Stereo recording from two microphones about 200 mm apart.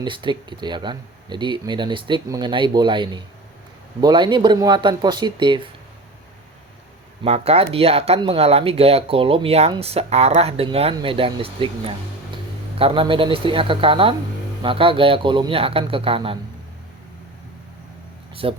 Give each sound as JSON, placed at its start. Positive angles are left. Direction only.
{"t": 0.0, "sound": "speech", "side_deg": -25}
{"t": 7.3, "sound": "speech", "side_deg": -30}
{"t": 18.4, "sound": "speech", "side_deg": -25}